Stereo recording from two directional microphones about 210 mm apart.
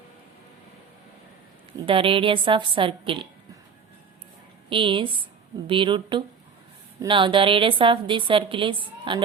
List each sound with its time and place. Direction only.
1.9 s a woman's voice: 25° right (ahead or behind)
4.7 s a woman's voice: 25° right (ahead or behind)